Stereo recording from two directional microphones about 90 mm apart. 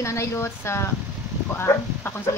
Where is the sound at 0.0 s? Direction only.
30° left (ahead or behind).